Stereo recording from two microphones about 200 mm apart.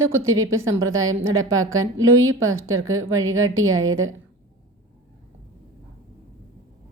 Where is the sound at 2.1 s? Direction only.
90° right.